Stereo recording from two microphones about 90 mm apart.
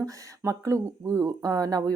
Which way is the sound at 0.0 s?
40° right (ahead or behind).